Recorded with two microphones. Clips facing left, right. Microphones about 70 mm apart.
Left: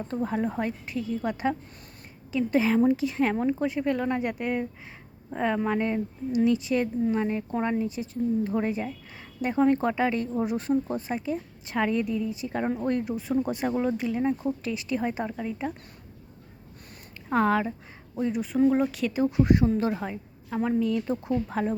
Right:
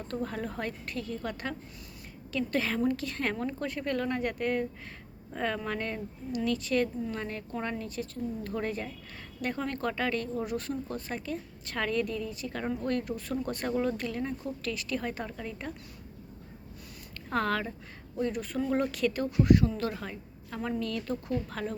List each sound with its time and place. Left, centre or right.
0.1 s speech: centre
17.2 s speech: centre
19.4 s a woman's voice: left